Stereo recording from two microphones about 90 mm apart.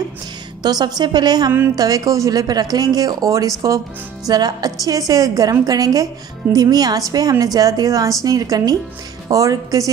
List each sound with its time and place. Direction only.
0.6 s a woman's voice: 45° right (ahead or behind)
4.3 s a woman's voice: 50° right (ahead or behind)